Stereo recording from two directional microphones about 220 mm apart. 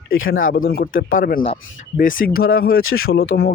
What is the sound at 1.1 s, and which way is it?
Speech, 40° left (ahead or behind).